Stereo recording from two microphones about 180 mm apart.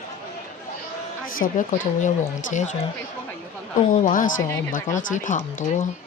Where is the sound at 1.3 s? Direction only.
50° left (ahead or behind).